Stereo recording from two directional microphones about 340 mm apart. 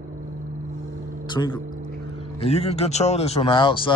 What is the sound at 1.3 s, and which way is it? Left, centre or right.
Speech, centre.